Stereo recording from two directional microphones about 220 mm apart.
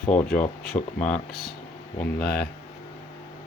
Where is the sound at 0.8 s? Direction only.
30° left (ahead or behind).